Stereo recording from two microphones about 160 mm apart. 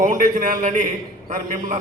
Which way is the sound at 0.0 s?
55° right (ahead or behind).